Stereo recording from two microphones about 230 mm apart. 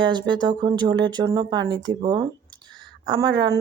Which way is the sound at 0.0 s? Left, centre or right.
Centre.